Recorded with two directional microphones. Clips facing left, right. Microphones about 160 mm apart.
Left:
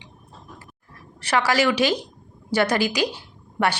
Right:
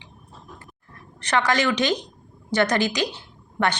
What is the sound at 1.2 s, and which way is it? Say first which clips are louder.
A woman's voice: left 1 dB; 10° left (ahead or behind).